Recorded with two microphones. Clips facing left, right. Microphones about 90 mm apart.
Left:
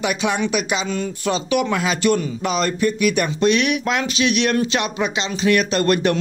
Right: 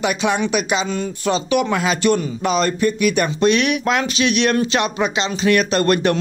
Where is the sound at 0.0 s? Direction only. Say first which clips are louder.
Right 2 dB; 35° right (ahead or behind).